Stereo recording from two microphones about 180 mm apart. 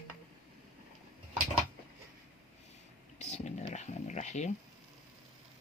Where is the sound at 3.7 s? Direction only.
40° left (ahead or behind).